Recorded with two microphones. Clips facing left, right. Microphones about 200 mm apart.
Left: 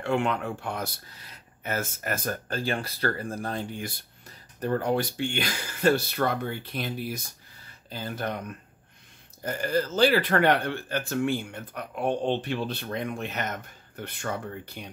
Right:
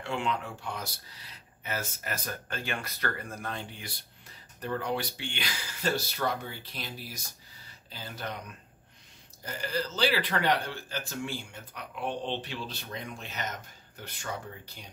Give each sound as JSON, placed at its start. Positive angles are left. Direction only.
{"t": 0.0, "sound": "speech", "side_deg": 55}